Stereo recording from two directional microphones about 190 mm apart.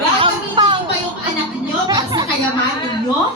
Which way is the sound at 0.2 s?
25° right (ahead or behind).